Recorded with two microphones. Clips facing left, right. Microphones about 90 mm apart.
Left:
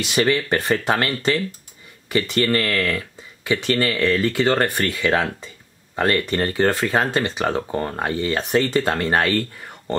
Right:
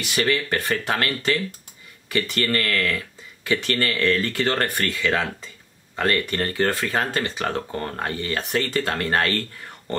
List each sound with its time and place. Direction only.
0.0 s speech: 20° left (ahead or behind)